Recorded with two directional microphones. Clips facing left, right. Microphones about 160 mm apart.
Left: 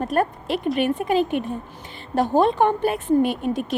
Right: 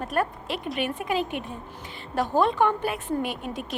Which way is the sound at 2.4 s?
25° left (ahead or behind).